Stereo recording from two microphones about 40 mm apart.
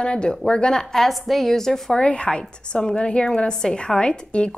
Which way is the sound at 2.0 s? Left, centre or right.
Left.